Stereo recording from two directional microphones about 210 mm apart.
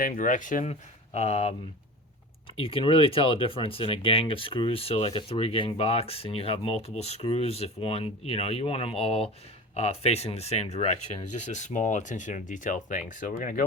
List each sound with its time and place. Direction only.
0.0 s speech: 40° left (ahead or behind)
2.6 s speech: 25° left (ahead or behind)